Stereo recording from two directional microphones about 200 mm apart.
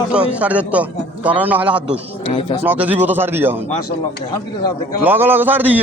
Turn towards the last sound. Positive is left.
turn(degrees=-10)  # may be behind; listen again after turning